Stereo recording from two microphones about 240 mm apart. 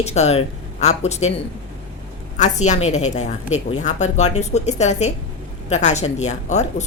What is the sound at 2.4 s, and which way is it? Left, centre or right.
A woman's voice, left.